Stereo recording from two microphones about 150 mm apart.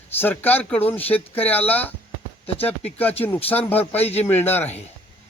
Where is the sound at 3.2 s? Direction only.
10° left (ahead or behind).